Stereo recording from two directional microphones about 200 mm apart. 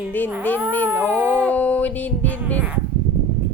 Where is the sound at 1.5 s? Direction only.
5° left (ahead or behind).